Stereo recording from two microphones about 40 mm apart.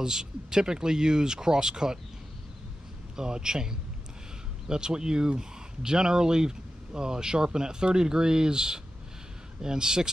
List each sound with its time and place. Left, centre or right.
0.0 s speech: centre
3.2 s speech: centre